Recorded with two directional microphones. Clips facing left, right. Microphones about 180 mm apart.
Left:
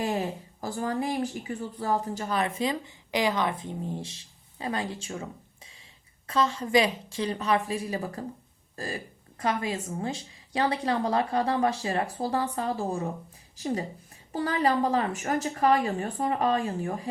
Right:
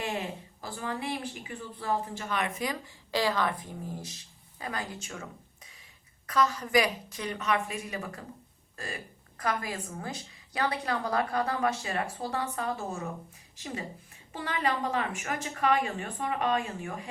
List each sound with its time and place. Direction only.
0.0 s a woman's voice: 40° left (ahead or behind)
8.7 s a sound: 35° left (ahead or behind)
9.4 s a woman's voice: 25° left (ahead or behind)